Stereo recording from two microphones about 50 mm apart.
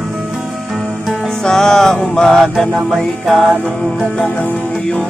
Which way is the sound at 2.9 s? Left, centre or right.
Centre.